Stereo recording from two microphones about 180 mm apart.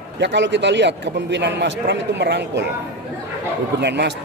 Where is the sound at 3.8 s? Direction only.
70° right (ahead or behind).